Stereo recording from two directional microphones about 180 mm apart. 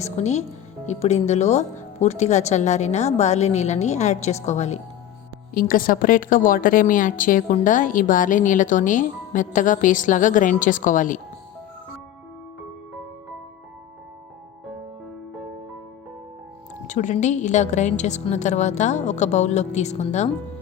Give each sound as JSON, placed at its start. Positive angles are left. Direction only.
{"t": 0.0, "sound": "speech", "side_deg": 40}
{"t": 5.5, "sound": "speech", "side_deg": 50}
{"t": 16.8, "sound": "speech", "side_deg": 45}